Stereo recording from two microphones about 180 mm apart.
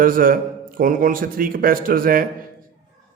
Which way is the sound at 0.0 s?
50° right (ahead or behind).